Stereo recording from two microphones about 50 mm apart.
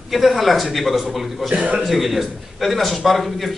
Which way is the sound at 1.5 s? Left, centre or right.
Right.